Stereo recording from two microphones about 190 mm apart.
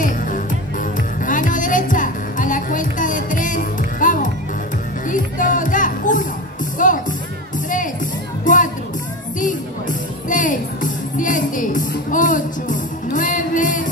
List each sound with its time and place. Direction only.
1.2 s music: 45° left (ahead or behind)
8.5 s music: 45° left (ahead or behind)